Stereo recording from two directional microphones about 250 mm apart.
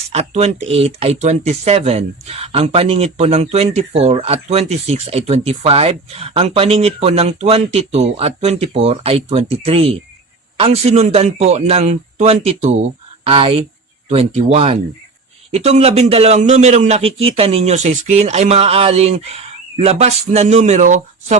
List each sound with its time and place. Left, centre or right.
0.1 s speech: right